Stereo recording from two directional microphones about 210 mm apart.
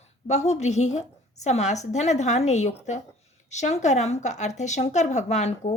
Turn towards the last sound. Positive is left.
turn(degrees=30)  # may be behind; listen again after turning